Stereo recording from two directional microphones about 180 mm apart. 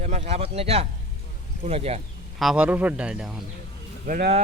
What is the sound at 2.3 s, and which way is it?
A man's voice, 5° right (ahead or behind).